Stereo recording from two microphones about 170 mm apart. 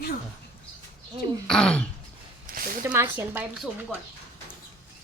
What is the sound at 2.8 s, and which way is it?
Speech, 15° right (ahead or behind).